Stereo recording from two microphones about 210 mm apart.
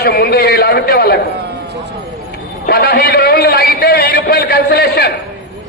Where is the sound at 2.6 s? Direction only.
45° left (ahead or behind).